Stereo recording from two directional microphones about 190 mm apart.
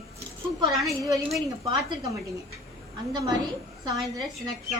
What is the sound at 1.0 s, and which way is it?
A woman's voice, 15° right (ahead or behind).